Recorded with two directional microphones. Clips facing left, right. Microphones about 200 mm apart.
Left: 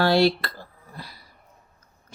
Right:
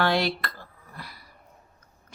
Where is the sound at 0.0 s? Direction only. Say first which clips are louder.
Left 5 dB; 35° left (ahead or behind).